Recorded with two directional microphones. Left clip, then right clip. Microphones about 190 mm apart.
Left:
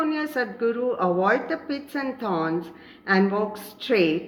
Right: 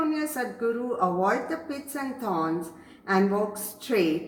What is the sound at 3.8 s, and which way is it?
Speech, 45° left (ahead or behind).